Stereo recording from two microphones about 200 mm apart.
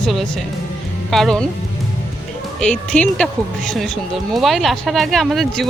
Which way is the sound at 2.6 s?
5° left (ahead or behind).